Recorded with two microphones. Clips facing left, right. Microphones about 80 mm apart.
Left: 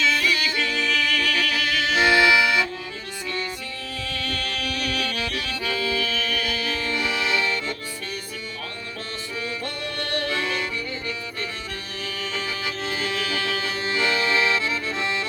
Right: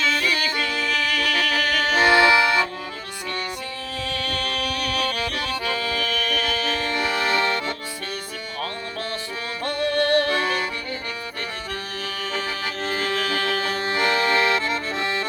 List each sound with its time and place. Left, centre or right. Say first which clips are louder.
0.1 s music: even; right
0.3 s music: right 1 dB; right
4.2 s accordion: right 2 dB; right
9.6 s music: right 9 dB; right
12.0 s music: right 1 dB; right